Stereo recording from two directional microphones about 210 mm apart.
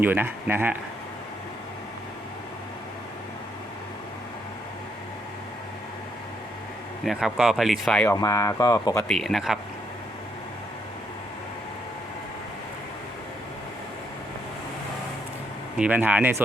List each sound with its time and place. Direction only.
0.0 s speech: 10° right (ahead or behind)
7.0 s speech: centre (ahead or behind)
8.1 s speech: 15° left (ahead or behind)
9.0 s speech: centre (ahead or behind)
15.8 s speech: 10° right (ahead or behind)